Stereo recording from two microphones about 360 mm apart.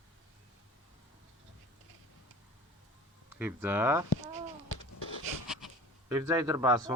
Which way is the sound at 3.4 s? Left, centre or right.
Centre.